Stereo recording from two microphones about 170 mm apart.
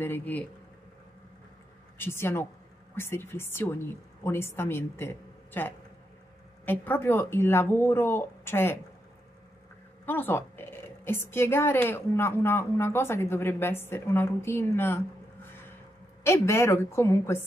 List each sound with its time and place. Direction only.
0.0 s a woman's voice: 10° left (ahead or behind)
2.0 s a woman's voice: 15° left (ahead or behind)
10.0 s a woman's voice: 10° left (ahead or behind)
16.3 s a woman's voice: 15° left (ahead or behind)